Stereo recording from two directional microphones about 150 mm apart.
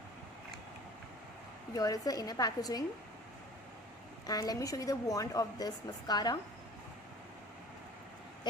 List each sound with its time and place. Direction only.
1.8 s a woman's voice: 25° left (ahead or behind)
4.3 s a woman's voice: 25° left (ahead or behind)